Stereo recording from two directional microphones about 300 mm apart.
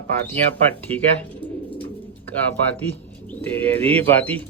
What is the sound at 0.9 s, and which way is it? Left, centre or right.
Speech, centre.